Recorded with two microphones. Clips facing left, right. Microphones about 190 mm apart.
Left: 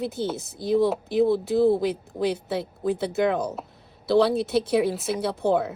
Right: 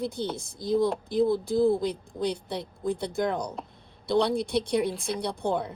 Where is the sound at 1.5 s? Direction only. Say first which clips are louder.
Left 3 dB; 65° left (ahead or behind).